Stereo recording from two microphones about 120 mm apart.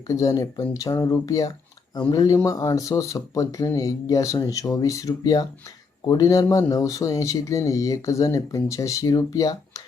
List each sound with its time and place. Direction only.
0.1 s speech: 25° left (ahead or behind)